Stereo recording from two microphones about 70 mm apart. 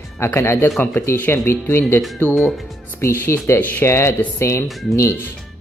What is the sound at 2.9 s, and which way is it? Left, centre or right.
Speech, left.